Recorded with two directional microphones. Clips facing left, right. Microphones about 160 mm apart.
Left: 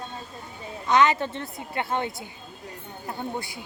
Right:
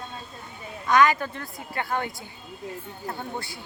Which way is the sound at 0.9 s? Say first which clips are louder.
Even; 25° left (ahead or behind).